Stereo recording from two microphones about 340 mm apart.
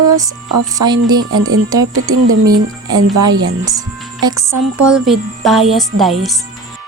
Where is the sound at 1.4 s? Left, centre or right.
Right.